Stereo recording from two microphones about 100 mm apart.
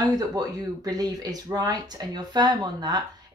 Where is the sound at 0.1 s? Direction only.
40° right (ahead or behind).